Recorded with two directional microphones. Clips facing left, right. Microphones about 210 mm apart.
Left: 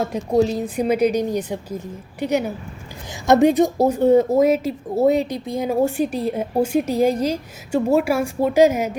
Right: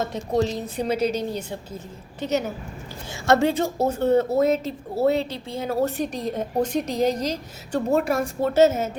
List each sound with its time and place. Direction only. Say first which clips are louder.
0.0 s a woman's voice: left 5 dB; 10° left (ahead or behind)